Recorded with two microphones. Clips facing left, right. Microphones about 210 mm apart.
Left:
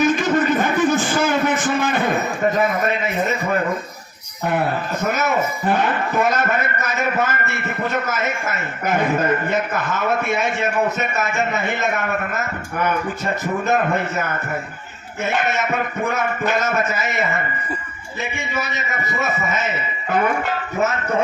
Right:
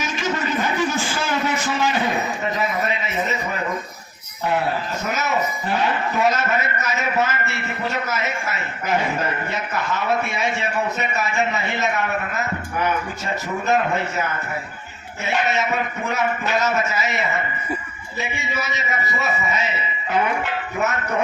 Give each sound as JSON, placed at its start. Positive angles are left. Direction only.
{"t": 0.0, "sound": "a sound", "side_deg": 50}
{"t": 5.0, "sound": "a man's voice", "side_deg": 50}
{"t": 18.3, "sound": "a man's voice", "side_deg": 50}